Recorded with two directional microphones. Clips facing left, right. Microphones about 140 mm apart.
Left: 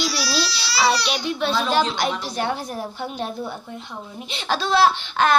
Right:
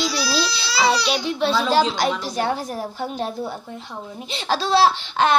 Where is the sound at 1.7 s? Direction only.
35° right (ahead or behind).